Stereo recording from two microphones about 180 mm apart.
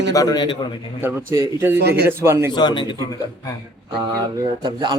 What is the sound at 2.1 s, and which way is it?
Speech, 15° right (ahead or behind).